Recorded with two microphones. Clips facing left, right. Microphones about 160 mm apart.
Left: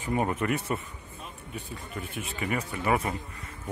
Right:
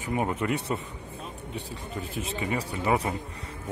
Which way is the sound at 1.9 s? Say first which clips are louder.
Right 4 dB; 30° right (ahead or behind).